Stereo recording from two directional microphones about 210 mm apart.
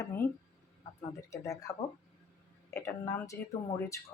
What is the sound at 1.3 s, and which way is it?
Speech, 15° left (ahead or behind).